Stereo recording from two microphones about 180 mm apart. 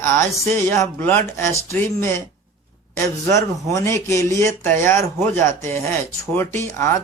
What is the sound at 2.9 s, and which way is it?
Speech, 15° left (ahead or behind).